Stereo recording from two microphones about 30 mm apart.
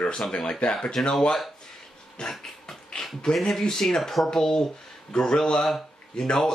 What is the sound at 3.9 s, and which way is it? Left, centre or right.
Speech, centre.